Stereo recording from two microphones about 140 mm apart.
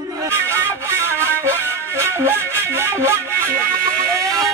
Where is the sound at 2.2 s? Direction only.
15° right (ahead or behind).